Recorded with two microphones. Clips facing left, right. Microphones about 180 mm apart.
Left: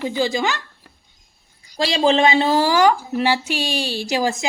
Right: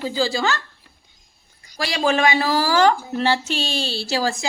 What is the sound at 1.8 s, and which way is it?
A woman's voice, 25° left (ahead or behind).